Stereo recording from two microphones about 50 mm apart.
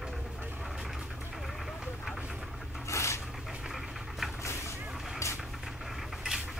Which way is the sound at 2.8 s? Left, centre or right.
Left.